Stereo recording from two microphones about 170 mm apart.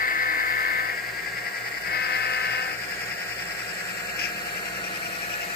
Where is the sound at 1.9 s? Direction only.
65° left (ahead or behind).